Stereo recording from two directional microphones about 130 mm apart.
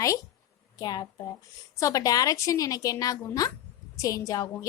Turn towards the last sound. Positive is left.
turn(degrees=25)  # may be behind; listen again after turning